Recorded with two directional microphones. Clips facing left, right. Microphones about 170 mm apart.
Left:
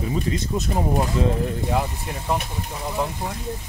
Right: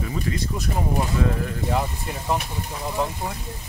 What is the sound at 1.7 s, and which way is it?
Speech, centre (ahead or behind).